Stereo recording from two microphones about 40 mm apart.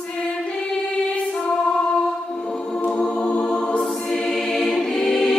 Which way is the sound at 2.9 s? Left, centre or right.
Left.